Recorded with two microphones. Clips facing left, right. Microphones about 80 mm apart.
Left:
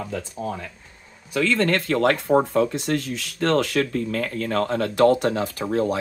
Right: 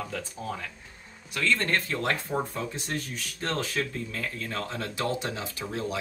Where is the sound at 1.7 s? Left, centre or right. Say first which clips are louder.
Left 8 dB; left.